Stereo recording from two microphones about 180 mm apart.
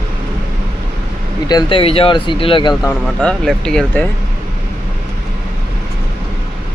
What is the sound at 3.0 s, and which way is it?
Speech, 5° left (ahead or behind).